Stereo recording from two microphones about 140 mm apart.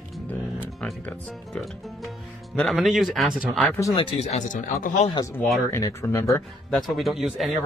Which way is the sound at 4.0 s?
45° left (ahead or behind).